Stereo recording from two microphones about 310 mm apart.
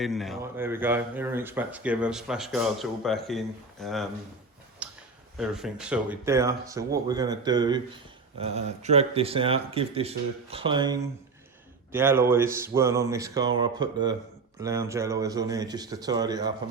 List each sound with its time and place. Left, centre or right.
0.0 s speech: centre
4.8 s a sound: centre
5.4 s speech: centre